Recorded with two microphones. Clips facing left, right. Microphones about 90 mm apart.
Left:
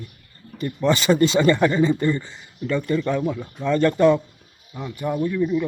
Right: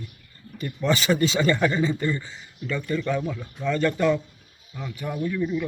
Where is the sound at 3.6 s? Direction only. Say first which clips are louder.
Left 5 dB; 20° left (ahead or behind).